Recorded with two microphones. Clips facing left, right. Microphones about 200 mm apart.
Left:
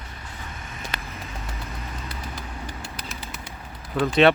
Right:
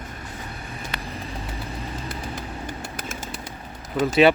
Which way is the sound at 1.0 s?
30° right (ahead or behind).